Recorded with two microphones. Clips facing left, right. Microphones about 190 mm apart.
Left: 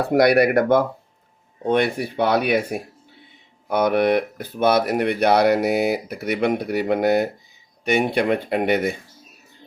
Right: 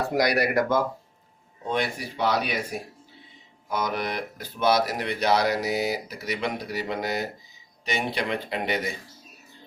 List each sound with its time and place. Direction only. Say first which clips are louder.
0.1 s speech: left 10 dB; 60° left (ahead or behind)